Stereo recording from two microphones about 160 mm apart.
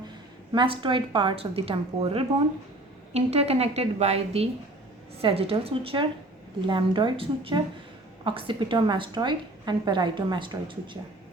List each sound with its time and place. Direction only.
0.5 s a woman's voice: 30° right (ahead or behind)